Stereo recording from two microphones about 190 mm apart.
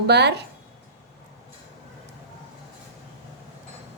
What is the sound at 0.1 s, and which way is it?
Speech, 60° right (ahead or behind).